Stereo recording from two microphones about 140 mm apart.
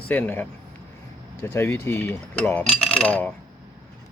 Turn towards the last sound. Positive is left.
turn(degrees=10)  # may be behind; listen again after turning